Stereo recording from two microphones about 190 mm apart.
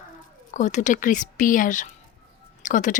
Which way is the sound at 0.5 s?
40° left (ahead or behind).